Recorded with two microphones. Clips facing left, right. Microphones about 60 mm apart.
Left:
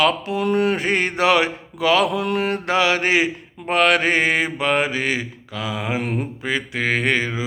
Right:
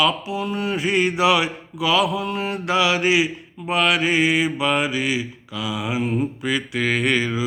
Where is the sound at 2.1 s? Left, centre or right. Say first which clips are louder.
Left 3 dB; left.